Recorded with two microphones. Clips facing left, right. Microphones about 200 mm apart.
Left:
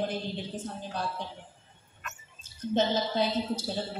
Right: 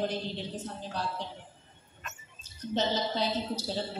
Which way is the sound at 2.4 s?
50° left (ahead or behind).